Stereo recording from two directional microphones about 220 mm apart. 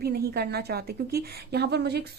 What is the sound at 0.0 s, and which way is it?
A woman's voice, 45° right (ahead or behind).